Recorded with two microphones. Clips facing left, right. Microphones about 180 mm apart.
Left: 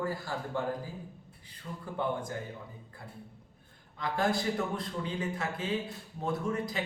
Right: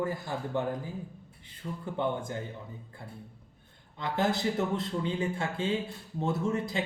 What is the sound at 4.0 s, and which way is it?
Speech, 25° right (ahead or behind).